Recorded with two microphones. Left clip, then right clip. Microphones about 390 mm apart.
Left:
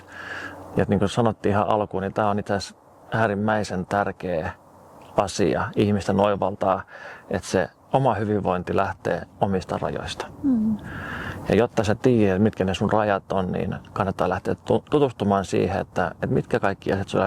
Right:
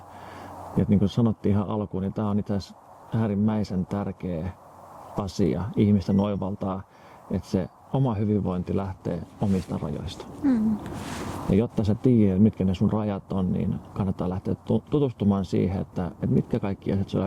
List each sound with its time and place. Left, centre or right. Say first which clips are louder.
0.8 s speech: left 5 dB; left
11.5 s speech: left 6 dB; left